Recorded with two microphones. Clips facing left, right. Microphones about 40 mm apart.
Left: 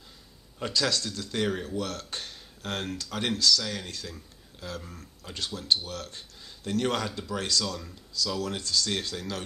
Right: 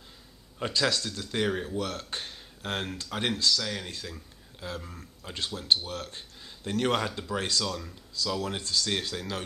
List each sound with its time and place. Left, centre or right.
0.6 s speech: centre
7.6 s speech: centre
8.4 s speech: right
8.8 s speech: centre